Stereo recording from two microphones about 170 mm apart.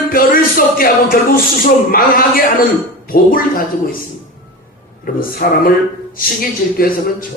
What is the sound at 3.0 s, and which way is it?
Speech, 55° left (ahead or behind).